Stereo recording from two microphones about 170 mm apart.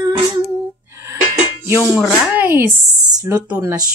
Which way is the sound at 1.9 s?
5° right (ahead or behind).